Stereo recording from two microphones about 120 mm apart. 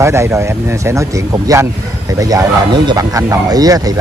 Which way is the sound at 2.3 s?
35° right (ahead or behind).